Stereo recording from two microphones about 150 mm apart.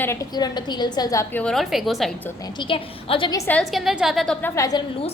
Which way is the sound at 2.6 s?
35° left (ahead or behind).